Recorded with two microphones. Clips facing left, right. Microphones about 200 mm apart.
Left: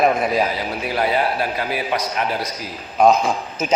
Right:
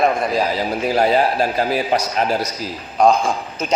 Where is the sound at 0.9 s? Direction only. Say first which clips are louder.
Right 4 dB; 40° right (ahead or behind).